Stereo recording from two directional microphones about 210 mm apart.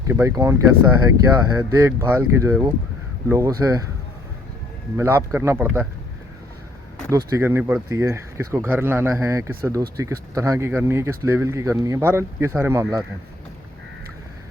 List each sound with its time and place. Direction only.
0.1 s speech: 15° right (ahead or behind)
4.9 s speech: 10° right (ahead or behind)
7.1 s speech: 15° right (ahead or behind)